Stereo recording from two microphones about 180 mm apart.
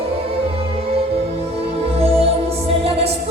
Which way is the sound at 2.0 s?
35° right (ahead or behind).